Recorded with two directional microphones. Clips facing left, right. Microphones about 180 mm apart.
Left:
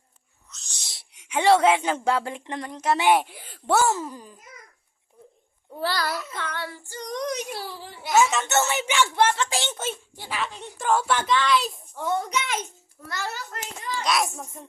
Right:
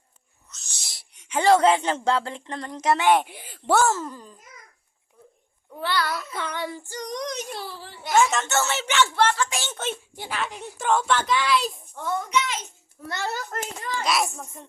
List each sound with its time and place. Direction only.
0.5 s speech: centre (ahead or behind)
3.5 s a sound: centre (ahead or behind)
3.8 s speech: 15° left (ahead or behind)
5.7 s a child's voice: 35° left (ahead or behind)
6.3 s child singing: 15° right (ahead or behind)
7.1 s a child's voice: 5° left (ahead or behind)
8.4 s speech: 15° left (ahead or behind)
9.3 s speech: 25° left (ahead or behind)
10.2 s a child's voice: centre (ahead or behind)
11.3 s a child's voice: 10° right (ahead or behind)
12.3 s a child's voice: 50° left (ahead or behind)
13.1 s a child's voice: 25° right (ahead or behind)
13.3 s a child's voice: 50° right (ahead or behind)
14.0 s a child's voice: centre (ahead or behind)